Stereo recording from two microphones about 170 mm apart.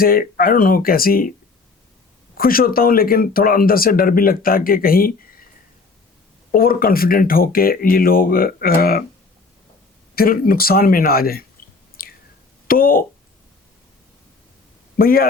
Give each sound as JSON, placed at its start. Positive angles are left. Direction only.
{"t": 0.0, "sound": "speech", "side_deg": 60}
{"t": 2.4, "sound": "speech", "side_deg": 60}
{"t": 6.5, "sound": "speech", "side_deg": 60}
{"t": 10.2, "sound": "speech", "side_deg": 60}
{"t": 12.0, "sound": "whispering", "side_deg": 55}
{"t": 12.6, "sound": "speech", "side_deg": 55}
{"t": 14.9, "sound": "speech", "side_deg": 60}